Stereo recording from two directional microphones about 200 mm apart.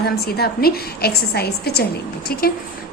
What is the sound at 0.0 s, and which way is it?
A woman's voice, 50° left (ahead or behind).